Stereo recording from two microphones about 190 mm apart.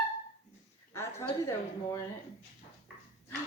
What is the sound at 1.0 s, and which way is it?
A woman's voice, 15° left (ahead or behind).